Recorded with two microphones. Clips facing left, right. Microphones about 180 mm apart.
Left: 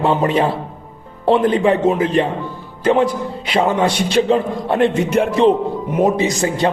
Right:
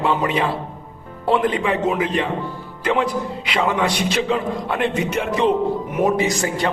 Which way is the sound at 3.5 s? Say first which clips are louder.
Left 5 dB; 30° left (ahead or behind).